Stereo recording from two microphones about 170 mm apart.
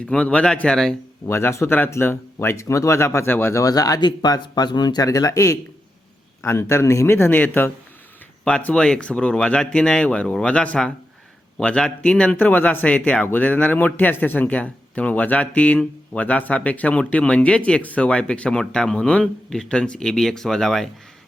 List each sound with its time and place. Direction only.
0.0 s a man's voice: 5° left (ahead or behind)
1.3 s a man's voice: 15° left (ahead or behind)